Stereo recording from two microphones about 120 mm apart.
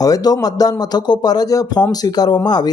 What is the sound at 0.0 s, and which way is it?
Speech, 30° left (ahead or behind).